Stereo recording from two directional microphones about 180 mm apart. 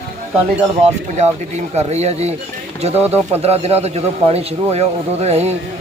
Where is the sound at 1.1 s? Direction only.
40° right (ahead or behind).